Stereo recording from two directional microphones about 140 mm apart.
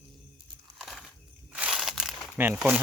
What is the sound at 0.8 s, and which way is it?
Crushing, centre (ahead or behind).